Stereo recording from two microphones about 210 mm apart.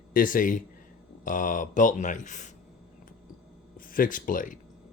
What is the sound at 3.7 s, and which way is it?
Speech, 40° left (ahead or behind).